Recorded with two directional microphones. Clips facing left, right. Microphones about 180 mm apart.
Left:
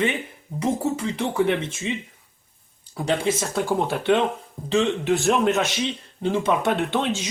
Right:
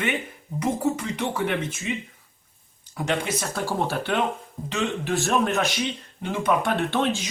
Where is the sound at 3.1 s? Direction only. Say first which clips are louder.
Left 4 dB; 30° left (ahead or behind).